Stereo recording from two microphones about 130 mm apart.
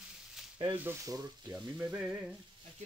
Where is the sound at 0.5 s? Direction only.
35° right (ahead or behind).